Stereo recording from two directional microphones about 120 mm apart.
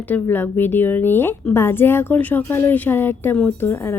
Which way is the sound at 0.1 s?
15° left (ahead or behind).